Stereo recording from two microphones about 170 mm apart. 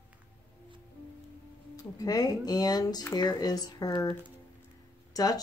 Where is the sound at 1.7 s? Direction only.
20° left (ahead or behind).